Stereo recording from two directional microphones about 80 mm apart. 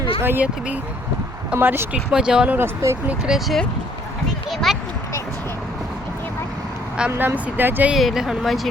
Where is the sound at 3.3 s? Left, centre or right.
Centre.